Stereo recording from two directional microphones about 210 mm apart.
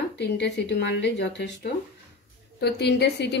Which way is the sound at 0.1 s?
55° left (ahead or behind).